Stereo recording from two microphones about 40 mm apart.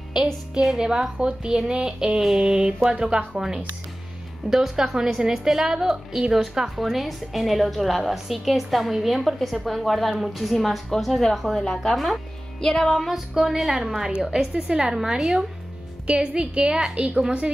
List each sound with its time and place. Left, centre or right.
0.6 s a woman's voice: centre
12.6 s music: centre
12.9 s a woman's voice: centre
16.1 s a woman's voice: right